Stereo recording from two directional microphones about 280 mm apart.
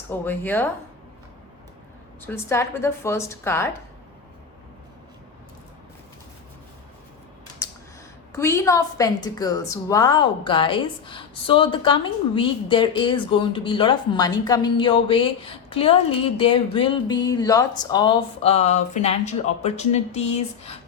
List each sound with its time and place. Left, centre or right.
0.1 s a woman's voice: centre
2.2 s a woman's voice: centre
8.3 s a woman's voice: centre